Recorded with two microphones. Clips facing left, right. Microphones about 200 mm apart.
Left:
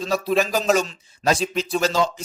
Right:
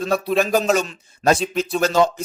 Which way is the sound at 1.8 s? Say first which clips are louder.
Right 6 dB; 55° right (ahead or behind).